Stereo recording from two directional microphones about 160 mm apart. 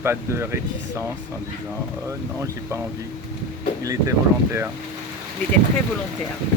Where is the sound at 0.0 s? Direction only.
15° right (ahead or behind).